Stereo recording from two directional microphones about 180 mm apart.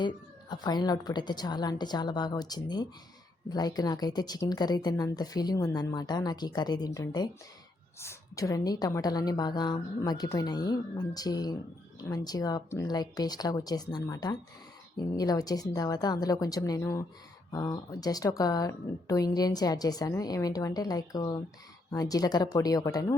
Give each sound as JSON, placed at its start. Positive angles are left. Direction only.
{"t": 0.5, "sound": "a woman's voice", "side_deg": 25}